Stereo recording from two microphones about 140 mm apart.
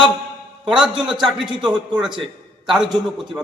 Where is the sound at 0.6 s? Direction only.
5° right (ahead or behind).